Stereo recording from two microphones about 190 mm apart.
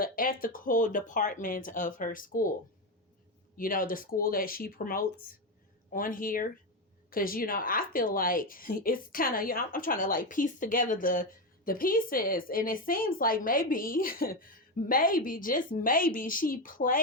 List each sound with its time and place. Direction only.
0.0 s a woman's voice: 50° left (ahead or behind)
3.6 s a woman's voice: 45° left (ahead or behind)